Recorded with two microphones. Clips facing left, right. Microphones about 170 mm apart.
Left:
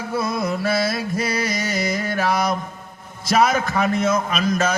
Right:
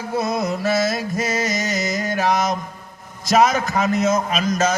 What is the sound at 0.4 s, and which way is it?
A man's voice, 45° right (ahead or behind).